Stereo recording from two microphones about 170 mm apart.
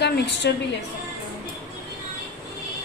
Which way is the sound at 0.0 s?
85° left.